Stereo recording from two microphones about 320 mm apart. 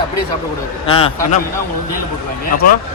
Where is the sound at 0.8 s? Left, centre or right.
Centre.